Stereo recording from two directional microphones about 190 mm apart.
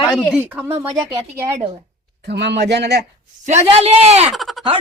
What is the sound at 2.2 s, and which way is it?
Speech, 60° right (ahead or behind).